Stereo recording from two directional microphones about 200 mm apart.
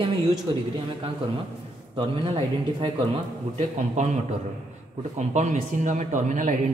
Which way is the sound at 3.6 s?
35° right (ahead or behind).